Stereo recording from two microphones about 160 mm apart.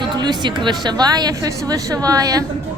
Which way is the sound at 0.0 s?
25° right (ahead or behind).